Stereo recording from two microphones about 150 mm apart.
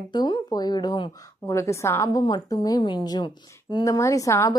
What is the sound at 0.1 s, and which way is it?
Speech, 30° left (ahead or behind).